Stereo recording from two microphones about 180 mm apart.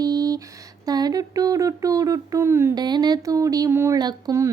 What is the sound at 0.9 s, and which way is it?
Speech, 20° right (ahead or behind).